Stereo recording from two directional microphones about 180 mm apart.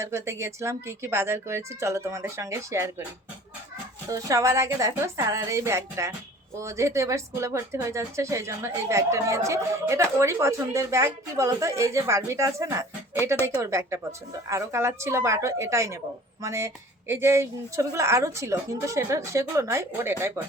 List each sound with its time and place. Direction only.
0.0 s a woman's voice: 15° right (ahead or behind)
4.1 s a woman's voice: 20° right (ahead or behind)